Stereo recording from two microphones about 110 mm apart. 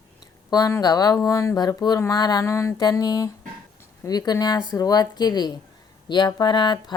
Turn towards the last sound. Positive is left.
turn(degrees=45)  # may be behind; listen again after turning